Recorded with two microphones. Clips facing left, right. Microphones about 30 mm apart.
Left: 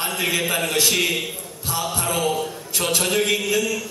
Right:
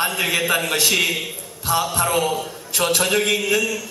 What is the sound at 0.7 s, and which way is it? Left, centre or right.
Speech, centre.